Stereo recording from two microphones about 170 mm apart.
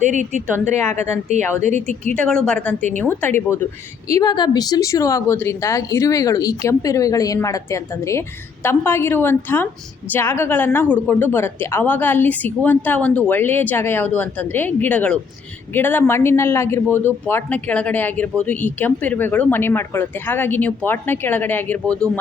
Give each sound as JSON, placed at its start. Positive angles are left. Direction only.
{"t": 0.0, "sound": "a woman's voice", "side_deg": -45}
{"t": 1.6, "sound": "a woman's voice", "side_deg": -45}
{"t": 2.1, "sound": "speech", "side_deg": 5}
{"t": 4.1, "sound": "a woman's voice", "side_deg": 25}